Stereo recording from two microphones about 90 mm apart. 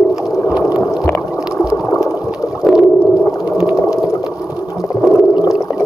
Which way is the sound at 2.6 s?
5° right (ahead or behind).